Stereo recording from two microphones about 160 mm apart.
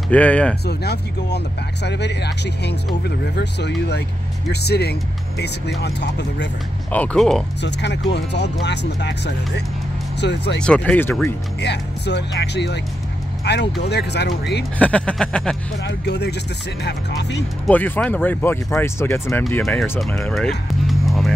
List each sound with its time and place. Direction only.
0.1 s speech: 10° left (ahead or behind)
0.7 s speech: 90° left
6.9 s speech: 10° left (ahead or behind)
7.6 s speech: 90° left
10.6 s speech: 5° left (ahead or behind)
11.6 s speech: 90° left
14.8 s speech: 10° left (ahead or behind)
15.8 s speech: 90° left
17.6 s speech: 10° left (ahead or behind)
19.6 s speech: centre (ahead or behind)
20.3 s music: centre (ahead or behind)